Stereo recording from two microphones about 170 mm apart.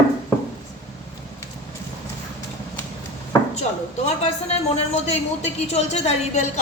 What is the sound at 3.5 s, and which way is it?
A woman's voice, 40° left (ahead or behind).